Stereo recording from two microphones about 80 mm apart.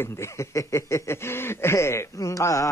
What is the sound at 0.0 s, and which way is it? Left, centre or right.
Speech, left.